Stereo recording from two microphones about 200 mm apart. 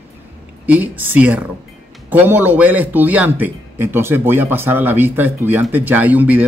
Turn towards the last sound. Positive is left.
turn(degrees=-10)  # may be behind; listen again after turning